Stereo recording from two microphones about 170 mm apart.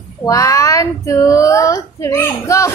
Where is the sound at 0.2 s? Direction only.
20° left (ahead or behind).